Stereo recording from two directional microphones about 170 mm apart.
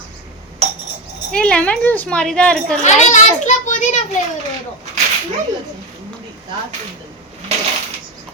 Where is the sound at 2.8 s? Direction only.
45° left (ahead or behind).